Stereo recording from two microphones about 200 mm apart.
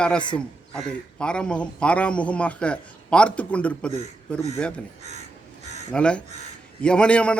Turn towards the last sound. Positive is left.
turn(degrees=5)  # may be behind; listen again after turning